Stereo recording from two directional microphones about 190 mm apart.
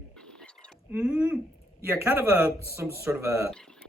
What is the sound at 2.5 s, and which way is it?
Speech, 15° left (ahead or behind).